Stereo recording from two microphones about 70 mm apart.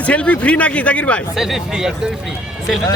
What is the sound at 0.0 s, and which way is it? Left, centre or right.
A man's voice, centre.